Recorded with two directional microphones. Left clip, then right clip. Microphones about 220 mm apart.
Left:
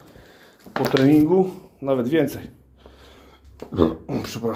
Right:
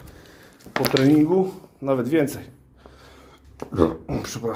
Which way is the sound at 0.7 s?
25° right (ahead or behind).